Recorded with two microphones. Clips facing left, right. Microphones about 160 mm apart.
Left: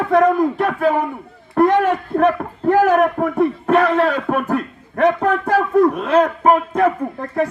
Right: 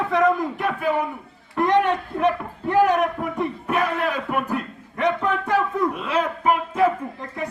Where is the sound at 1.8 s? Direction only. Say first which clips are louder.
Left 5 dB; 50° left (ahead or behind).